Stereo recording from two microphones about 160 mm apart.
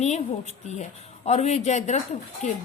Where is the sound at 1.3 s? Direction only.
45° left (ahead or behind).